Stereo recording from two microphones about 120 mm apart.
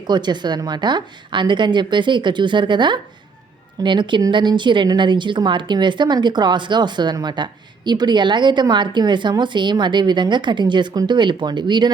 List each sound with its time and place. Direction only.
0.1 s a woman's voice: 40° right (ahead or behind)